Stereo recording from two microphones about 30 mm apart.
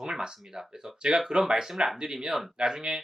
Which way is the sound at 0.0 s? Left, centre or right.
Centre.